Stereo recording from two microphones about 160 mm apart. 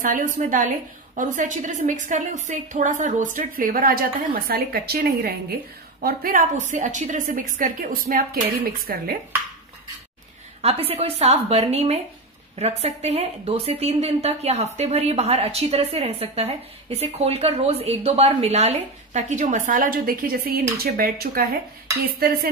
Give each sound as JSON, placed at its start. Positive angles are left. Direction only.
{"t": 0.0, "sound": "a woman's voice", "side_deg": -55}
{"t": 6.0, "sound": "a woman's voice", "side_deg": -60}
{"t": 10.6, "sound": "a woman's voice", "side_deg": -40}